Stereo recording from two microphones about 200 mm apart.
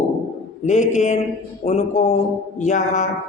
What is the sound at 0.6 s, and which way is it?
Speech, 35° left (ahead or behind).